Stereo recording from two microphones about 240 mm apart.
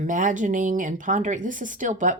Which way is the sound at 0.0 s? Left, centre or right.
Right.